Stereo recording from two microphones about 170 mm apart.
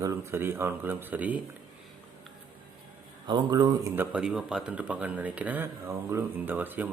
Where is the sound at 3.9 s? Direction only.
10° right (ahead or behind).